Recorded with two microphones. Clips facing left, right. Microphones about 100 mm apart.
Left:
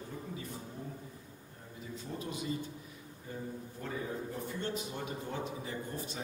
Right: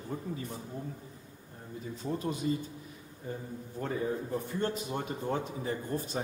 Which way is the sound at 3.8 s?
45° right (ahead or behind).